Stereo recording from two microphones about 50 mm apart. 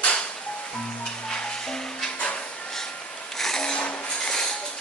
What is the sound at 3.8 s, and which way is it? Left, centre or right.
Rub, centre.